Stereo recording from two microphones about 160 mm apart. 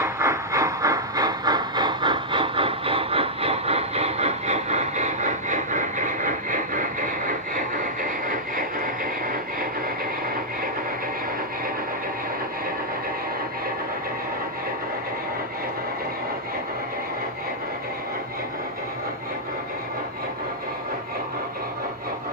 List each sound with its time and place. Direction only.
0.0 s train: 20° right (ahead or behind); by 9.6 s 60° right (ahead or behind)